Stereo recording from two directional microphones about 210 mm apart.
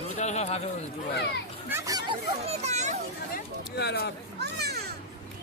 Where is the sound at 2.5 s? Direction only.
30° right (ahead or behind).